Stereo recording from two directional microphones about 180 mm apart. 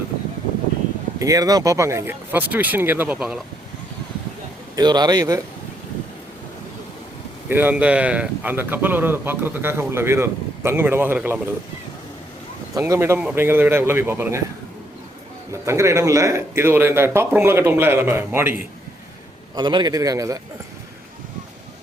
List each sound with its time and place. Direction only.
1.2 s speech: 20° right (ahead or behind); by 3.4 s 5° right (ahead or behind)
4.7 s a man's voice: 25° right (ahead or behind)
7.4 s speech: 10° right (ahead or behind)
12.7 s speech: 15° right (ahead or behind)
15.6 s speech: 15° right (ahead or behind)
19.5 s a man's voice: 25° right (ahead or behind)